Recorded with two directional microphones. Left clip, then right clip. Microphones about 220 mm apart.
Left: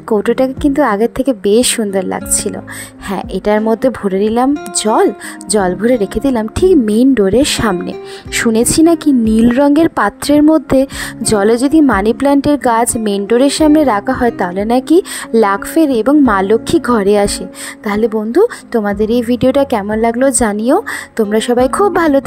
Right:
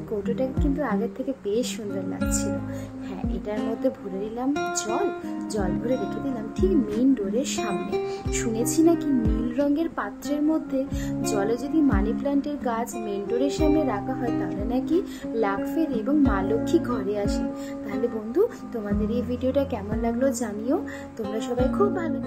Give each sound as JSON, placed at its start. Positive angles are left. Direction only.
{"t": 0.2, "sound": "a woman's voice", "side_deg": 45}